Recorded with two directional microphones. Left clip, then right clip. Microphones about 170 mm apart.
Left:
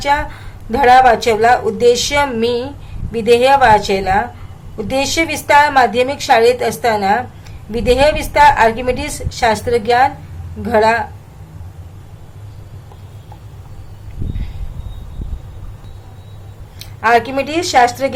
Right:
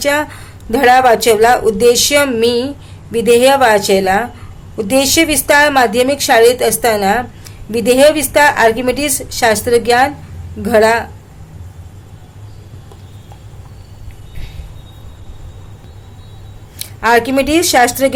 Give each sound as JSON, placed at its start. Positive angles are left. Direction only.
{"t": 0.0, "sound": "a woman's voice", "side_deg": -35}
{"t": 16.7, "sound": "a woman's voice", "side_deg": -45}